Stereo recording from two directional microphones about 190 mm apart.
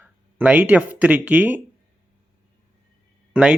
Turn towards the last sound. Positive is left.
turn(degrees=-5)  # may be behind; listen again after turning